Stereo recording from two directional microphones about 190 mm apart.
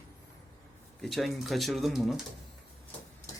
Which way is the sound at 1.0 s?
Centre (ahead or behind).